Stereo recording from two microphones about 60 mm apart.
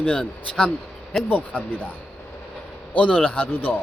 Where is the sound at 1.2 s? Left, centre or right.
Left.